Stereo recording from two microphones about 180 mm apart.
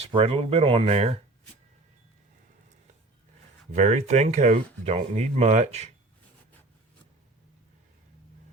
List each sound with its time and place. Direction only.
0.0 s speech: 30° right (ahead or behind)
3.8 s speech: 40° right (ahead or behind)